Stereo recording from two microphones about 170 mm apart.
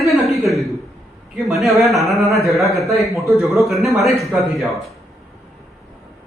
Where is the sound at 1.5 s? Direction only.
Centre (ahead or behind).